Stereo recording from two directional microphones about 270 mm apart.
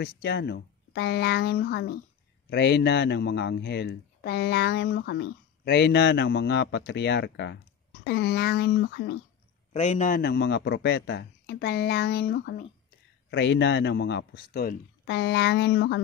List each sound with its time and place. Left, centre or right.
0.0 s speech: left
9.7 s speech: left